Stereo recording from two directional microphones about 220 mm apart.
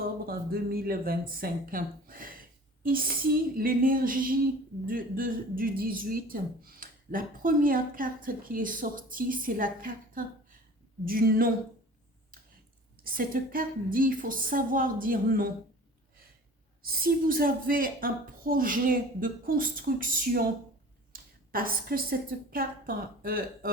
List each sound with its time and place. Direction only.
0.3 s speech: 45° right (ahead or behind)
13.1 s speech: 40° right (ahead or behind)
16.8 s speech: 40° right (ahead or behind)